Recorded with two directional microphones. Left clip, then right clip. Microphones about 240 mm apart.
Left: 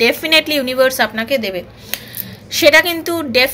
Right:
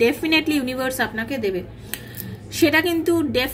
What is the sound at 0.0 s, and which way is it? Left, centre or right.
A woman's voice, centre.